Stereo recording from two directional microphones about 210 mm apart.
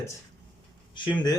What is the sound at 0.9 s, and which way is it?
Speech, 20° left (ahead or behind).